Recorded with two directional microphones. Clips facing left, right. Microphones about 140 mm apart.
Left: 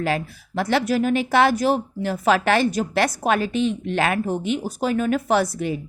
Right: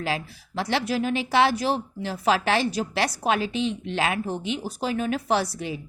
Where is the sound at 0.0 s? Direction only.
50° left (ahead or behind).